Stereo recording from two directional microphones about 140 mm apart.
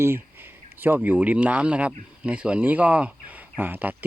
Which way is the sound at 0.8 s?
10° right (ahead or behind).